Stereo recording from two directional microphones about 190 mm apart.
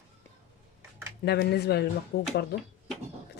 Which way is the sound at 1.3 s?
60° left (ahead or behind).